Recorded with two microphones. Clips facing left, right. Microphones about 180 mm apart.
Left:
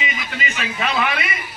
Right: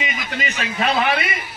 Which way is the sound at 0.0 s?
45° right (ahead or behind).